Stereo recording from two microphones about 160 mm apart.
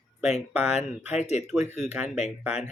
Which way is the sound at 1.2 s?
45° left (ahead or behind).